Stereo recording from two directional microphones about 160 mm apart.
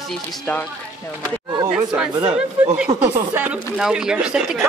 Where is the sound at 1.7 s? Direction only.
5° right (ahead or behind).